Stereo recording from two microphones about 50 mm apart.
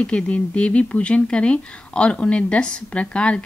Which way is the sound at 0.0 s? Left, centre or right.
Left.